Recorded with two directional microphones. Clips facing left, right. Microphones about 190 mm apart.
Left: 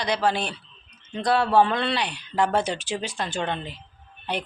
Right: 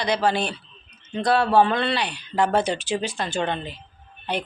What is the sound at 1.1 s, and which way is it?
Speech, 5° right (ahead or behind).